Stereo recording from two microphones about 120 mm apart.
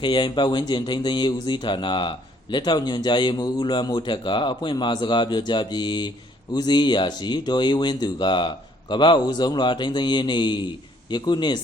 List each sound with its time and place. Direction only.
0.0 s speech: 40° left (ahead or behind)